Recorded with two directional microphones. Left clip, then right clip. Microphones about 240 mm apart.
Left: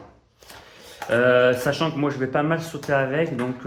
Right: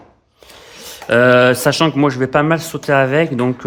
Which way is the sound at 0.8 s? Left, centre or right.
Right.